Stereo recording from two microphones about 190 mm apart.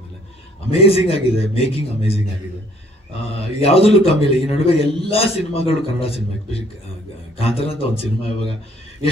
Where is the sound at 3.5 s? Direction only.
30° left (ahead or behind).